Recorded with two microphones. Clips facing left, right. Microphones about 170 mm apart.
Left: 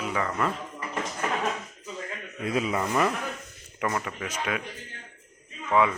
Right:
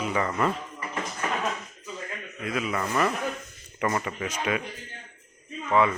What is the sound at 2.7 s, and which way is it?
Speech, 15° left (ahead or behind).